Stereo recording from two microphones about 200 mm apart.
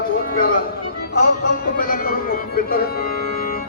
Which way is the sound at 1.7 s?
45° left (ahead or behind).